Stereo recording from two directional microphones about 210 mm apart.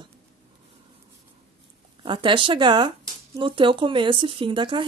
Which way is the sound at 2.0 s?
25° right (ahead or behind).